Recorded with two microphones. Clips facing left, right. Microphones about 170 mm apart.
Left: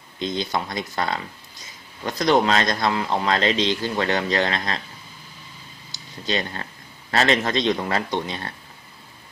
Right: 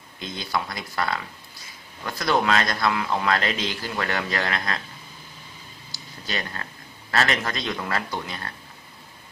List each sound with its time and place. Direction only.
0.2 s speech: 20° left (ahead or behind)
5.9 s a sound: 20° left (ahead or behind)
7.1 s speech: 25° left (ahead or behind)